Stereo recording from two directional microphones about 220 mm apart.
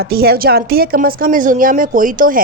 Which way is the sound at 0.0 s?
45° right (ahead or behind).